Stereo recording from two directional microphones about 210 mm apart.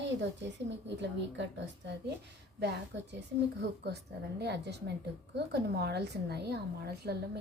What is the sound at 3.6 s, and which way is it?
A woman's voice, 50° right (ahead or behind).